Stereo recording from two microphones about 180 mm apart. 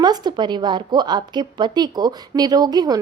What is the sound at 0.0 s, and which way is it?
A woman's voice, 25° right (ahead or behind).